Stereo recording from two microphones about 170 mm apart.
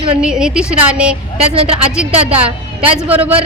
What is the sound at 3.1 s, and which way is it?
Speech, 35° right (ahead or behind).